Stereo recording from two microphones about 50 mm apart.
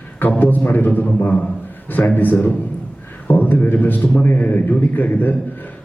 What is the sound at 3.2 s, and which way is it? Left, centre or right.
A man's voice, left.